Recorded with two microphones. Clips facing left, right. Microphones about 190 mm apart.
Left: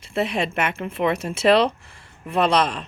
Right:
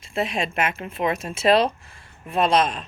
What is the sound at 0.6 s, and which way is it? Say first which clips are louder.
Speech: even; 70° left (ahead or behind).